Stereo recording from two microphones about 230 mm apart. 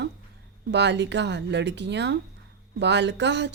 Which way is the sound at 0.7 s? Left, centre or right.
Right.